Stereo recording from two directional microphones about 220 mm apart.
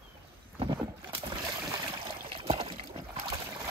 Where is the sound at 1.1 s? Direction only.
20° right (ahead or behind).